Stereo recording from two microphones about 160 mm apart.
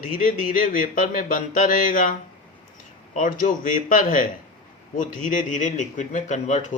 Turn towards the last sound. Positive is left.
turn(degrees=50)  # may be behind; listen again after turning